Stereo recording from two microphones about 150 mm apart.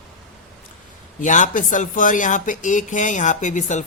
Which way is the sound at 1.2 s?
55° left (ahead or behind).